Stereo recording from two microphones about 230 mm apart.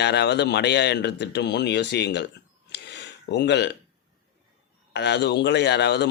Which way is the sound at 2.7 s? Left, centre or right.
Left.